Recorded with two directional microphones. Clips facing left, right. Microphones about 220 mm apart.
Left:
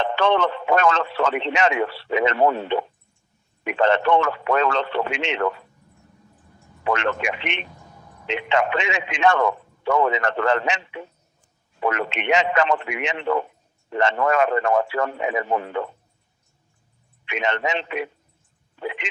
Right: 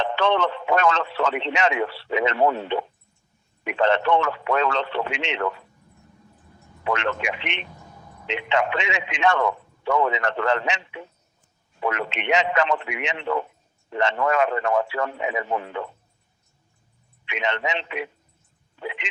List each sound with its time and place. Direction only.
0.0 s speech: 50° left (ahead or behind)
6.8 s speech: 45° left (ahead or behind)
17.2 s speech: 45° left (ahead or behind)